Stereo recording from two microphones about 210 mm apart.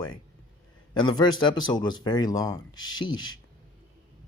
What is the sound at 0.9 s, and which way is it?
Speech, 20° left (ahead or behind).